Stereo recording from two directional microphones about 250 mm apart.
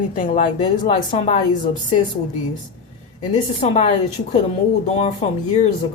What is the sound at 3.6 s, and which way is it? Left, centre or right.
Speech, left.